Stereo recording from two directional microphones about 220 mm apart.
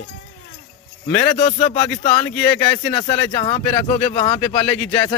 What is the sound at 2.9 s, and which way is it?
Speech, 25° left (ahead or behind).